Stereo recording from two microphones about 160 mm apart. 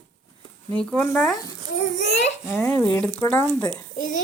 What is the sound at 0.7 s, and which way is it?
Speech, 5° left (ahead or behind).